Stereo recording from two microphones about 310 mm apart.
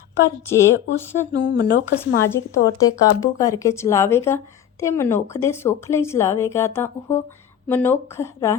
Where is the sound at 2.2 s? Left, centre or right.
Centre.